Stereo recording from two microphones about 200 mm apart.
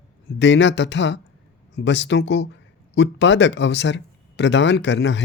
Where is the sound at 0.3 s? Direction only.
65° left (ahead or behind).